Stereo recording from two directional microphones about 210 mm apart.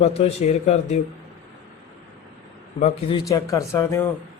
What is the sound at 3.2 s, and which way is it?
Speech, 15° left (ahead or behind).